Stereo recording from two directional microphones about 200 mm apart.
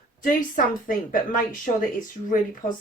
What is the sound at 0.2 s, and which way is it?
Speech, 40° left (ahead or behind).